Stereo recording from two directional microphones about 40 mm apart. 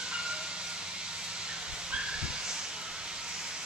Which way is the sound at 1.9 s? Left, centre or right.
Right.